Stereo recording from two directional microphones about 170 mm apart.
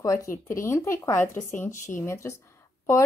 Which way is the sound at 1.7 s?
50° left (ahead or behind).